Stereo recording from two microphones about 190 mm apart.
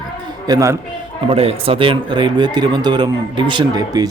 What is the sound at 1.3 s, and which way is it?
Speech, 30° right (ahead or behind).